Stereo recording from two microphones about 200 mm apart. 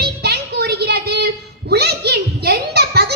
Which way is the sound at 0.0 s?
55° right (ahead or behind).